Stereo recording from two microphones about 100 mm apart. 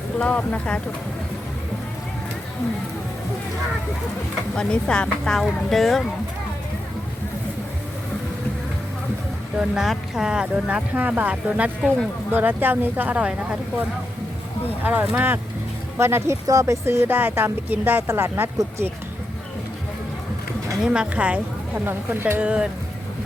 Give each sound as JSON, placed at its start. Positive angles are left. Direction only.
{"t": 0.2, "sound": "speech", "side_deg": 10}
{"t": 4.5, "sound": "speech", "side_deg": 10}
{"t": 9.6, "sound": "speech", "side_deg": -5}
{"t": 14.7, "sound": "speech", "side_deg": -15}
{"t": 20.8, "sound": "speech", "side_deg": -10}